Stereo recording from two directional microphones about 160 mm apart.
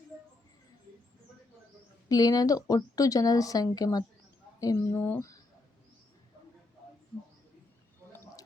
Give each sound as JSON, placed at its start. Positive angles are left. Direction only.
{"t": 2.0, "sound": "a woman's voice", "side_deg": 25}